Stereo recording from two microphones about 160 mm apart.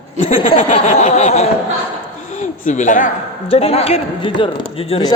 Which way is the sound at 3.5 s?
40° left (ahead or behind).